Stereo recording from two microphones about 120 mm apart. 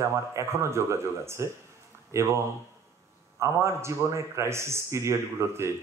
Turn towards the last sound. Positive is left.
turn(degrees=-20)  # may be behind; listen again after turning